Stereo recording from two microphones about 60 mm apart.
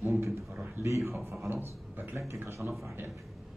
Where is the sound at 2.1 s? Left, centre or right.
Right.